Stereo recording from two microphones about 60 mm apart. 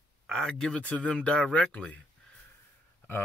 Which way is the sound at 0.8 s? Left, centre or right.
Left.